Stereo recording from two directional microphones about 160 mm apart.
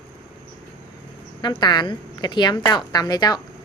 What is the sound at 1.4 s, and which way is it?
Speech, 30° left (ahead or behind).